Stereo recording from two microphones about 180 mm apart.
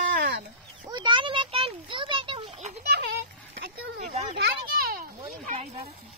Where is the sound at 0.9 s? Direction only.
25° right (ahead or behind).